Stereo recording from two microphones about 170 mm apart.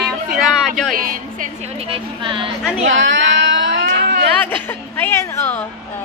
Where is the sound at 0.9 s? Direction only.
55° right (ahead or behind).